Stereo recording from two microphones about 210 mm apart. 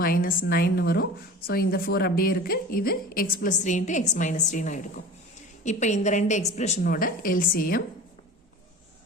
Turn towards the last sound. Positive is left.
turn(degrees=45)  # may be behind; listen again after turning